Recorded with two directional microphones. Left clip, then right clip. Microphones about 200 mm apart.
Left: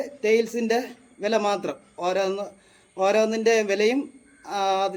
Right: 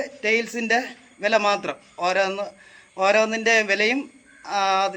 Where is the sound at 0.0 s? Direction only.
5° left (ahead or behind).